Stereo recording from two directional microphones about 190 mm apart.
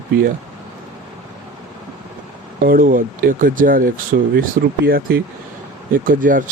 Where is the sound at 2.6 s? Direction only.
45° right (ahead or behind).